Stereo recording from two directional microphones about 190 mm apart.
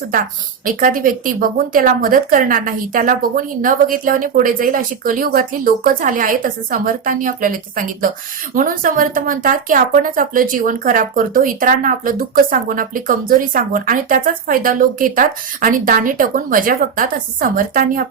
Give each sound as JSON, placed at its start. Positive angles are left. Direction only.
{"t": 0.6, "sound": "speech", "side_deg": -45}